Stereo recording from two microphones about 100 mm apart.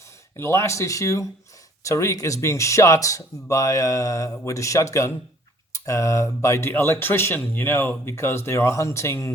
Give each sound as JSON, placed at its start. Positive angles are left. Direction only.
{"t": 0.3, "sound": "speech", "side_deg": 30}